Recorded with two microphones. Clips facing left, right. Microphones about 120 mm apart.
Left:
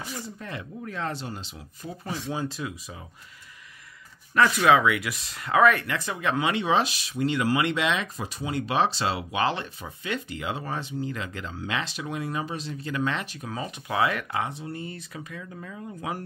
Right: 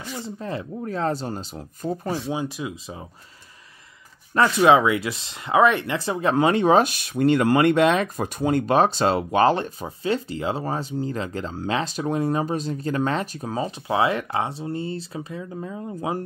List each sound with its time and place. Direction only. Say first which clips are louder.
0.4 s speech: right 7 dB; 30° right (ahead or behind)
2.3 s speech: right 3 dB; 15° right (ahead or behind)
2.7 s speech: right 5 dB; 30° right (ahead or behind)
4.3 s speech: right 3 dB; 30° right (ahead or behind)